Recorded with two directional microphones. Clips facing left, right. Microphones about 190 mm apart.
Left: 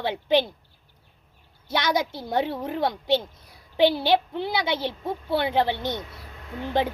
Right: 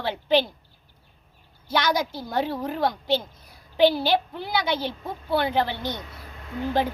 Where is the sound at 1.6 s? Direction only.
25° left (ahead or behind).